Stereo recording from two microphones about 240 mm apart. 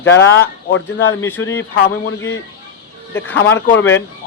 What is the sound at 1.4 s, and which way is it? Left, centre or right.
Speech, centre.